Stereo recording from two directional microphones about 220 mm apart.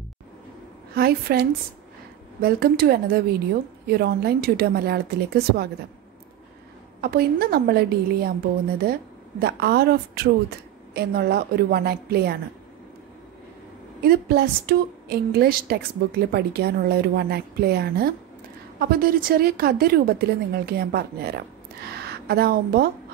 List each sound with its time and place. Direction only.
0.9 s a woman's voice: 45° right (ahead or behind)
7.0 s a woman's voice: 45° right (ahead or behind)
9.4 s a woman's voice: 45° right (ahead or behind)
14.0 s a woman's voice: 45° right (ahead or behind)